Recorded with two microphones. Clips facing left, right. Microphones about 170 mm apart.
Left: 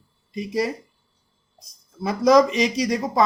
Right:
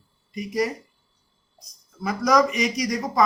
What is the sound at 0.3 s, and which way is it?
Speech, 25° left (ahead or behind).